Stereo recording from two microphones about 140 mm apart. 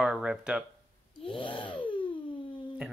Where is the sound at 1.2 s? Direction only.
40° left (ahead or behind).